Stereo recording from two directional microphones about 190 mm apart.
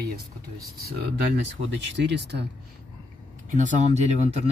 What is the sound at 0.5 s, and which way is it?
Speech, 55° right (ahead or behind).